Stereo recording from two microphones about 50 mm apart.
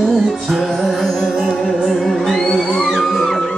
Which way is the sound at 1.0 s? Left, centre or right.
Centre.